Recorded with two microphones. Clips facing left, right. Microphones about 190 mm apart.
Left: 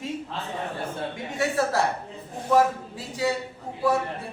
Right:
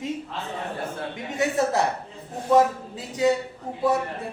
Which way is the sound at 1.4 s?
20° right (ahead or behind).